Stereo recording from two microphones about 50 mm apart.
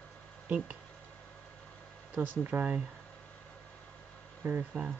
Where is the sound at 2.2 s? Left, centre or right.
Right.